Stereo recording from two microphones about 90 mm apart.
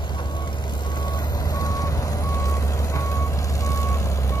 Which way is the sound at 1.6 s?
40° left (ahead or behind).